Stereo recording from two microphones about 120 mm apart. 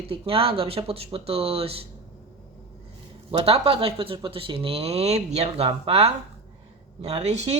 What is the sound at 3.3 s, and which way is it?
Speech, 55° right (ahead or behind).